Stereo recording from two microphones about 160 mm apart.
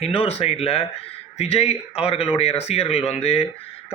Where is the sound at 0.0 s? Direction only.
35° left (ahead or behind).